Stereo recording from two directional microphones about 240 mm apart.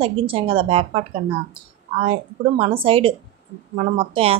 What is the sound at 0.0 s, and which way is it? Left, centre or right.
Speech, right.